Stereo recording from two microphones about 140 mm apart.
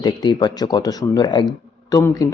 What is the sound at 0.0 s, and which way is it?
Speech, 30° left (ahead or behind).